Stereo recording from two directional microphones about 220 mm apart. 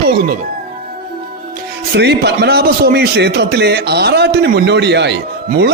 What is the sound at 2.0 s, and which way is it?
A man's voice, 50° right (ahead or behind).